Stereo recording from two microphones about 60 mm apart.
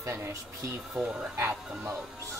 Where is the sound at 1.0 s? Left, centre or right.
Right.